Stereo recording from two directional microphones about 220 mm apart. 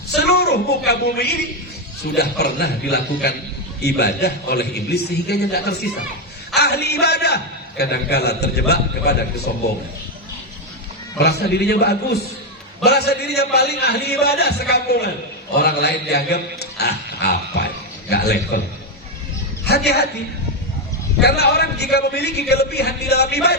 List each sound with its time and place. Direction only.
0.2 s a woman's voice: 50° left (ahead or behind)
11.2 s a man's voice: 50° left (ahead or behind)
19.6 s speech: 45° left (ahead or behind)
21.2 s a man's voice: 50° left (ahead or behind)